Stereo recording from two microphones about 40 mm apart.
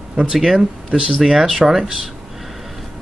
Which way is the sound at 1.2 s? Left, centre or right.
Centre.